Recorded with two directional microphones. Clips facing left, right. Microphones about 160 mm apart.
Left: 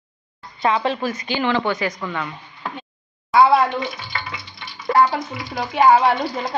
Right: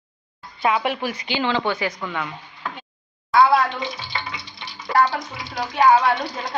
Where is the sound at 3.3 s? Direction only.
20° left (ahead or behind).